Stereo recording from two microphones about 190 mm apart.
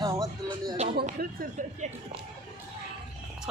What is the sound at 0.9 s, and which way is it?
Speech, 50° right (ahead or behind).